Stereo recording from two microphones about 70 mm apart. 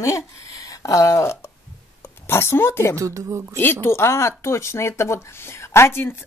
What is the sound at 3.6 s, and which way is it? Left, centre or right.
Speech, left.